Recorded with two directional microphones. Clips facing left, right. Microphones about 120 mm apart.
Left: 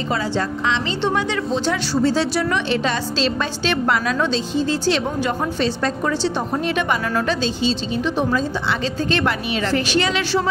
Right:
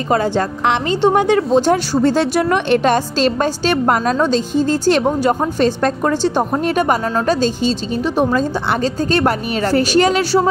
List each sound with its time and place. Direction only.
0.1 s a woman's voice: 50° right (ahead or behind)